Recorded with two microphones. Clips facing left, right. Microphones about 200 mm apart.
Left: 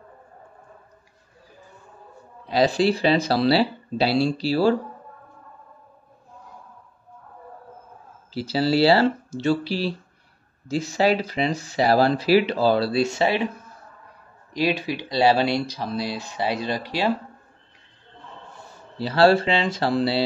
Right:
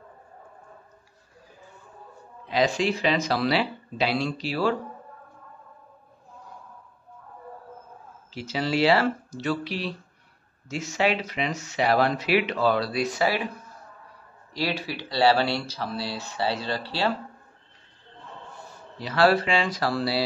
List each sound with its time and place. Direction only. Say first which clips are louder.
2.4 s speech: left 4 dB; 35° left (ahead or behind)
8.3 s speech: left 6 dB; 35° left (ahead or behind)
14.5 s speech: left 5 dB; 15° left (ahead or behind)
18.9 s speech: left 4 dB; 30° left (ahead or behind)